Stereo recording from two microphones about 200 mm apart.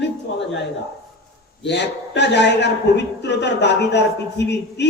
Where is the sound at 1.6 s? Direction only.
60° left (ahead or behind).